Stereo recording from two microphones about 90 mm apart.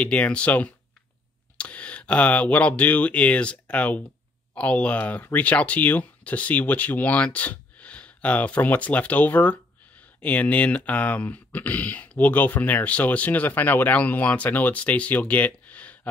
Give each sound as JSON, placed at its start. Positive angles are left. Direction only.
{"t": 0.0, "sound": "speech", "side_deg": 15}